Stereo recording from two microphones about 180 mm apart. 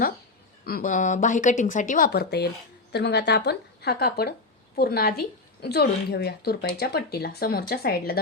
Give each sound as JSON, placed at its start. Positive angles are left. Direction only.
{"t": 0.6, "sound": "a woman's voice", "side_deg": 55}
{"t": 2.0, "sound": "speech", "side_deg": 65}